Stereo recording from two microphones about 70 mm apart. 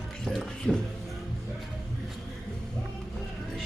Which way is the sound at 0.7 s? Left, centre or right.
Centre.